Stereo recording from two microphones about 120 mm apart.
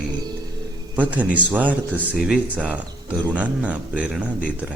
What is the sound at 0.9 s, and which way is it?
Speech, 15° right (ahead or behind).